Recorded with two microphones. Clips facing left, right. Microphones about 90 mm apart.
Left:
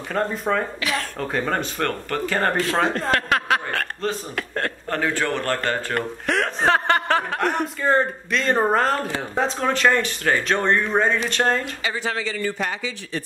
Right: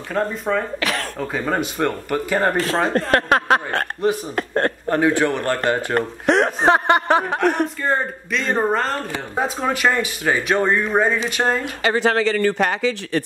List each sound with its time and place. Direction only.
0.1 s speech: centre (ahead or behind)
0.7 s cough: 55° right (ahead or behind)
1.2 s speech: 5° right (ahead or behind)
2.5 s a man's voice: 35° right (ahead or behind)
4.0 s speech: 15° right (ahead or behind)
4.4 s a man's voice: 35° right (ahead or behind)
4.8 s speech: 15° right (ahead or behind)
7.8 s speech: centre (ahead or behind)
11.8 s speech: 60° right (ahead or behind)